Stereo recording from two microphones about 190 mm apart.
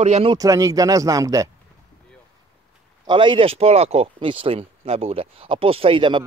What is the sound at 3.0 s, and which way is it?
Speech, 25° right (ahead or behind).